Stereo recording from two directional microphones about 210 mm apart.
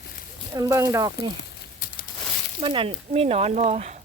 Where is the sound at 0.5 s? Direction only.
15° right (ahead or behind).